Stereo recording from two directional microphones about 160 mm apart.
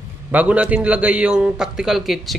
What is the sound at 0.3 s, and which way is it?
A man's voice, 10° right (ahead or behind).